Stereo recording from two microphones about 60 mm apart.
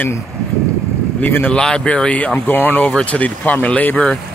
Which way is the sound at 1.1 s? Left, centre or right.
Left.